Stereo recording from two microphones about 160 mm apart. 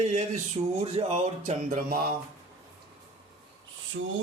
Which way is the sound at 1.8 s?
70° right (ahead or behind).